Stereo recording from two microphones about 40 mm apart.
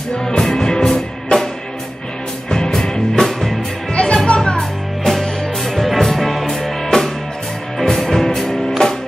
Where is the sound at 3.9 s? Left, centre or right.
Left.